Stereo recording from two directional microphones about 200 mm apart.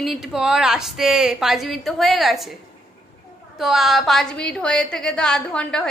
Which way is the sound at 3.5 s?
Centre (ahead or behind).